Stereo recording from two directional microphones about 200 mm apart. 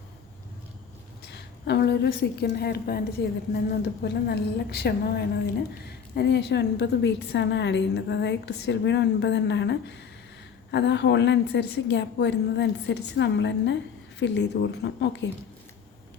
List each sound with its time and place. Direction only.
1.2 s a woman's voice: 55° left (ahead or behind)